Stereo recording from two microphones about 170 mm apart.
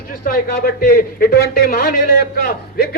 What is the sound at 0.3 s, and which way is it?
A man's voice, 60° left (ahead or behind).